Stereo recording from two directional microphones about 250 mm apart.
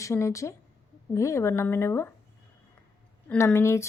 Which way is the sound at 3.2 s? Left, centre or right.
Centre.